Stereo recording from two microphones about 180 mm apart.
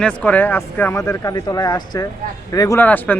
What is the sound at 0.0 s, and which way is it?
A man's voice, 5° left (ahead or behind).